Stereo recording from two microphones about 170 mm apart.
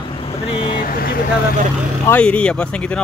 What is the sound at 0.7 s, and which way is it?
Speech, 60° left (ahead or behind).